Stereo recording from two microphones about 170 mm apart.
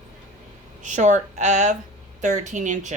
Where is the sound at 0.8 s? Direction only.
45° right (ahead or behind).